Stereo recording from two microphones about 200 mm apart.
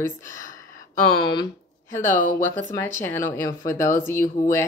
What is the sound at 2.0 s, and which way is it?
Speech, 40° left (ahead or behind).